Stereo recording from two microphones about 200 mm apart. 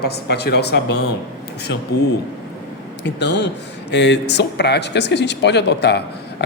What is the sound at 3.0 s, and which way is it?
Speech, 60° left (ahead or behind).